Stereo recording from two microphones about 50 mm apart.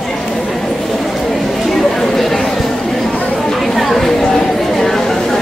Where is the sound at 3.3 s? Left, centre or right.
Centre.